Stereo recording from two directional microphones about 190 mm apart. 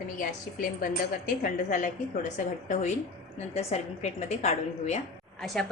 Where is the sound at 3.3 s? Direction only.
35° left (ahead or behind).